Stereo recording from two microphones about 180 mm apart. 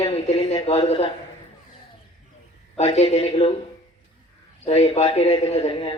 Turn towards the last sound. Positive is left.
turn(degrees=30)  # may be behind; listen again after turning